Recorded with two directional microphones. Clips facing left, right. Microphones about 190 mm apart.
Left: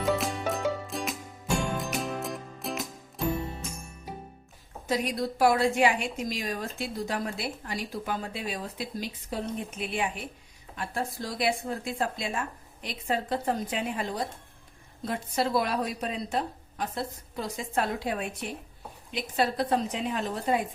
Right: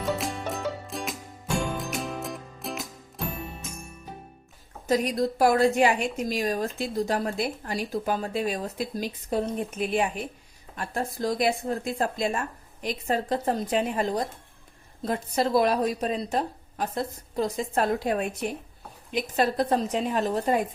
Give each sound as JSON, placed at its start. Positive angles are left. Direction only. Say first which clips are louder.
{"t": 0.0, "sound": "music", "louder": "left 1 dB", "side_deg": 0}
{"t": 4.9, "sound": "a woman's voice", "louder": "right 5 dB", "side_deg": -45}